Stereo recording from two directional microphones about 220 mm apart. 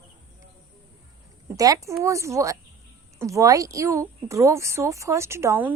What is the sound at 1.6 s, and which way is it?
A woman's voice, 15° right (ahead or behind).